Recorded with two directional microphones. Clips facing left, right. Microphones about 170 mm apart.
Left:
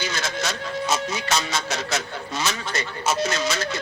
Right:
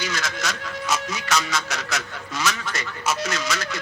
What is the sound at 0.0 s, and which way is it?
Speech, 30° left (ahead or behind).